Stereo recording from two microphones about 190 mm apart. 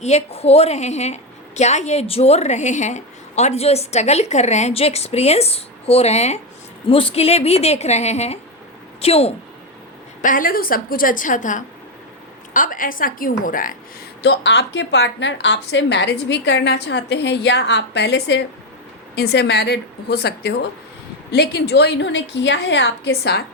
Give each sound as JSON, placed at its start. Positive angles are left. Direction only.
{"t": 0.0, "sound": "a woman's voice", "side_deg": 35}
{"t": 10.2, "sound": "a woman's voice", "side_deg": 45}
{"t": 14.2, "sound": "a woman's voice", "side_deg": 65}